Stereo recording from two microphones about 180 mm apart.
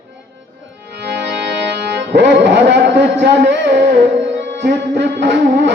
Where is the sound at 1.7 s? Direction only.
75° right (ahead or behind).